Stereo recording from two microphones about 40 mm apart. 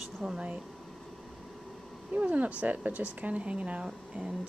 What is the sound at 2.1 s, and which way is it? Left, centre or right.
Speech, right.